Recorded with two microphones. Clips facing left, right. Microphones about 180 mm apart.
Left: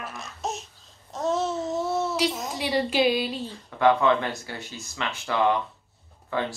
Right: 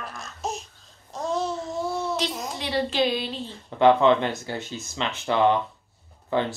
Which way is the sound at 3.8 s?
25° right (ahead or behind).